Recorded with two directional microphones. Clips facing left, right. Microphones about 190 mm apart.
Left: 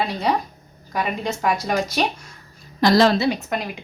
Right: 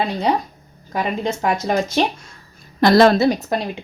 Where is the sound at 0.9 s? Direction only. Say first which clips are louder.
Right 3 dB; 25° right (ahead or behind).